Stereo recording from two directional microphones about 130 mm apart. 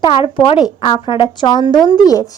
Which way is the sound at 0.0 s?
35° left (ahead or behind).